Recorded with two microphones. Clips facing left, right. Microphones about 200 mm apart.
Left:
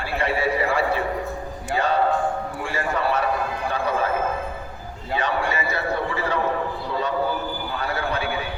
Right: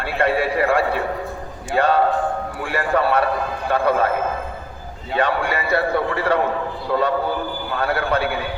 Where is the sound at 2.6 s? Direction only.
60° right (ahead or behind).